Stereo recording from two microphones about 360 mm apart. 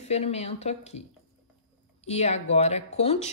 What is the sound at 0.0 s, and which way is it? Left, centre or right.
A woman's voice, centre.